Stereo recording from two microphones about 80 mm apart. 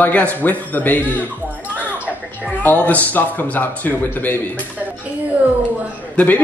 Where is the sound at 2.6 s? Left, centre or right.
Left.